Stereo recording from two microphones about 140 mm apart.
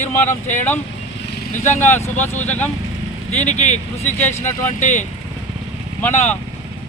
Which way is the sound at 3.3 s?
55° left (ahead or behind).